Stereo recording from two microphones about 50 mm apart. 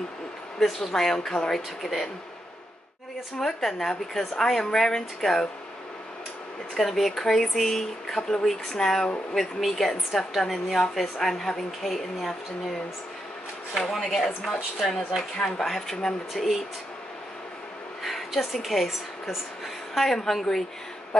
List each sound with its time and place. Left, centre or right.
0.9 s a woman's voice: centre
3.3 s speech: centre
6.8 s a woman's voice: centre
13.8 s speech: centre
15.3 s speech: centre
18.0 s a woman's voice: centre